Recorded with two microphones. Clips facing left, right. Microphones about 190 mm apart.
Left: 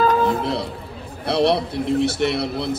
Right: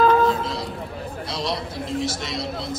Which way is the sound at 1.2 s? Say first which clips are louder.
Left 11 dB; 60° left (ahead or behind).